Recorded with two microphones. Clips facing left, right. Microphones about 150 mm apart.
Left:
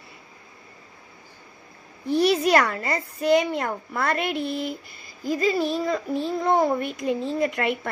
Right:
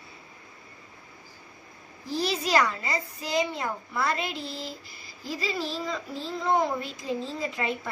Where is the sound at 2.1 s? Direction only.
60° left (ahead or behind).